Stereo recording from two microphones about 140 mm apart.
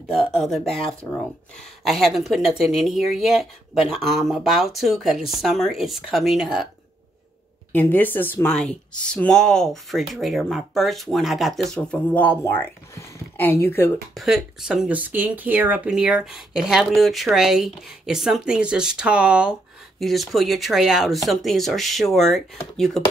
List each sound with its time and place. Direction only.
0.2 s speech: centre (ahead or behind)
7.7 s speech: 15° left (ahead or behind)
14.1 s speech: 5° right (ahead or behind)